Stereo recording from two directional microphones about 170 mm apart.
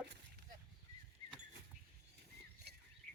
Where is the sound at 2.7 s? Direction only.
75° right (ahead or behind).